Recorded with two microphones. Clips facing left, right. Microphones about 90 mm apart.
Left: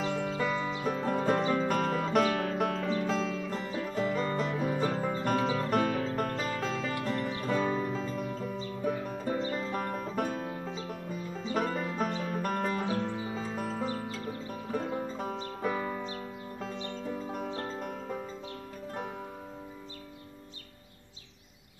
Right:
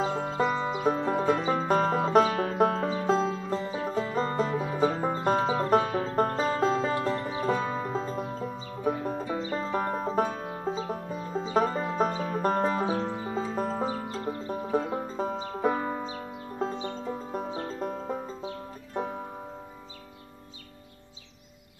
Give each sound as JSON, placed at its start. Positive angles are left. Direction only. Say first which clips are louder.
{"t": 0.0, "sound": "music", "louder": "right 4 dB", "side_deg": -35}